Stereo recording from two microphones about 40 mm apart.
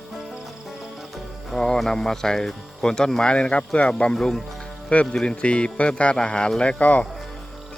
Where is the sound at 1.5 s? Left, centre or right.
Centre.